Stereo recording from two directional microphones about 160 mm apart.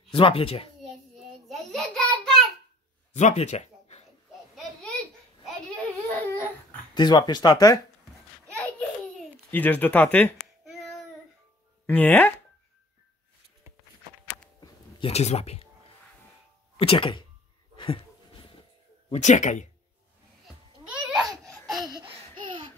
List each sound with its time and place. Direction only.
0.1 s speech: 35° left (ahead or behind)
1.5 s child singing: 5° left (ahead or behind)
3.2 s speech: 45° left (ahead or behind)
5.8 s babbling: 10° left (ahead or behind)
6.9 s speech: 25° left (ahead or behind)
8.7 s a sound: 10° left (ahead or behind)
10.6 s child singing: centre (ahead or behind)
11.8 s speech: 10° left (ahead or behind)
14.6 s a sound: 35° left (ahead or behind)
16.7 s speech: 35° left (ahead or behind)
17.7 s a sound: 30° left (ahead or behind)
19.1 s speech: 50° left (ahead or behind)
20.4 s babbling: 5° right (ahead or behind)